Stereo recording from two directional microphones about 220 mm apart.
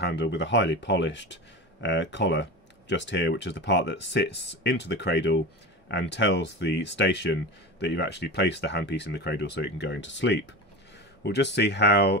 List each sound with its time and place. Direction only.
0.0 s speech: 50° left (ahead or behind)